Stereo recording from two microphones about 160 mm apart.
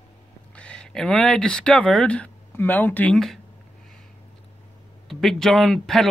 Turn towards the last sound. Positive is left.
turn(degrees=0)  # may be behind; listen again after turning